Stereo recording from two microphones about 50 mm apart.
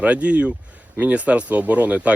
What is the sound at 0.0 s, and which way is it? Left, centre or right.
Speech, right.